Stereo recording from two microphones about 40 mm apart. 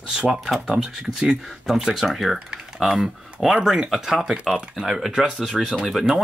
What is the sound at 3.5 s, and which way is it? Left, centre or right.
Speech, centre.